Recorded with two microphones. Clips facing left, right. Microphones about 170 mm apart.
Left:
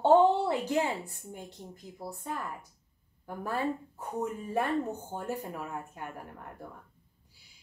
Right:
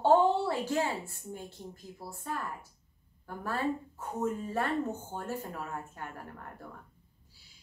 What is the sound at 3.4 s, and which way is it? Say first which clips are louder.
A woman's voice: even; 15° left (ahead or behind).